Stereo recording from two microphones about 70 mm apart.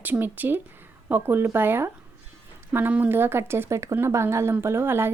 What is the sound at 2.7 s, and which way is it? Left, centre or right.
Speech, right.